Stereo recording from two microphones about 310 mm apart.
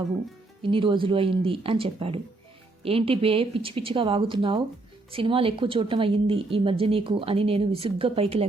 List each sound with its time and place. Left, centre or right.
0.6 s speech: centre